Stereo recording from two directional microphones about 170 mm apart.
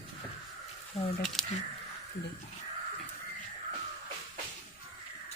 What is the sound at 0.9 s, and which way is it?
Speech, 40° left (ahead or behind).